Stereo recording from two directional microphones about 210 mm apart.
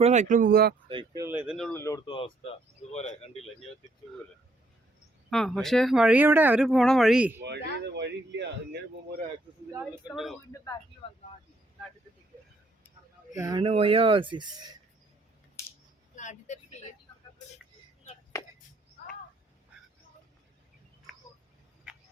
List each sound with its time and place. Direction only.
0.0 s speech: 35° right (ahead or behind)
0.9 s speech: 20° right (ahead or behind); by 1.8 s centre (ahead or behind)
1.8 s speech: 15° left (ahead or behind)
5.3 s speech: centre (ahead or behind)
7.4 s speech: 55° right (ahead or behind)
13.3 s speech: 15° right (ahead or behind)
15.6 s scissors: 15° left (ahead or behind)
16.1 s vehicle: 35° left (ahead or behind)
18.3 s a sound: 15° left (ahead or behind)